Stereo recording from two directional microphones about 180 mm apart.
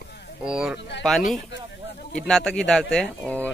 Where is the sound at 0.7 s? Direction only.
75° left (ahead or behind).